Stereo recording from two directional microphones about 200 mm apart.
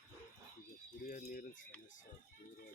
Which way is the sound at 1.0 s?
40° left (ahead or behind).